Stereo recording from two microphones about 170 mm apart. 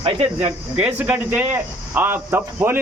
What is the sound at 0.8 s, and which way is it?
Speech, 10° right (ahead or behind).